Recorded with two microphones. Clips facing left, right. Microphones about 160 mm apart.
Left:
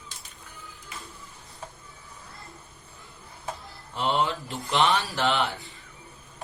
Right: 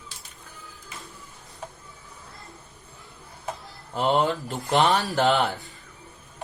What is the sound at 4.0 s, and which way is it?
Speech, 45° right (ahead or behind).